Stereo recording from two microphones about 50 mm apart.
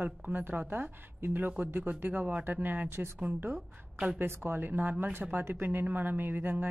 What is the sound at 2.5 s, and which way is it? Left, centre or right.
Speech, right.